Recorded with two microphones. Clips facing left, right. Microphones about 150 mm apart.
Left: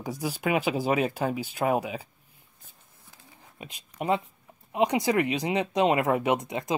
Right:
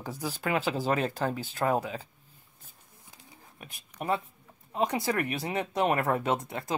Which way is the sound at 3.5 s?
20° left (ahead or behind).